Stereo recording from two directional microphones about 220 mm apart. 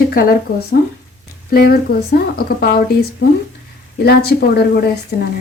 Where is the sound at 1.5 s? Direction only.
45° left (ahead or behind).